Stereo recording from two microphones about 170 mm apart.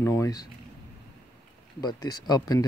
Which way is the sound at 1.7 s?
20° left (ahead or behind).